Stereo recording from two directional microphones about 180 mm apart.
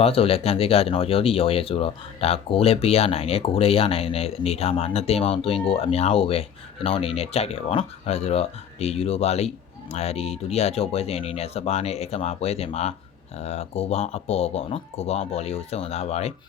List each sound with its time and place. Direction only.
0.0 s speech: 30° left (ahead or behind)